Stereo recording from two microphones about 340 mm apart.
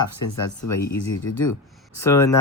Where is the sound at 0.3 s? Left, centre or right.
Left.